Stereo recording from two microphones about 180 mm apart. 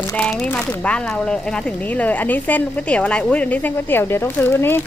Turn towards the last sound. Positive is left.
turn(degrees=15)  # may be behind; listen again after turning